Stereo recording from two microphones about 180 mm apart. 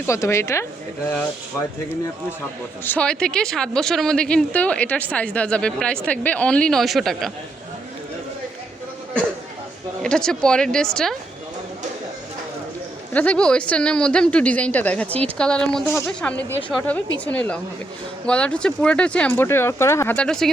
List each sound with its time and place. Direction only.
0.1 s speech: 15° left (ahead or behind)
2.8 s speech: 10° left (ahead or behind)
10.0 s speech: 5° left (ahead or behind)
13.1 s speech: 5° left (ahead or behind)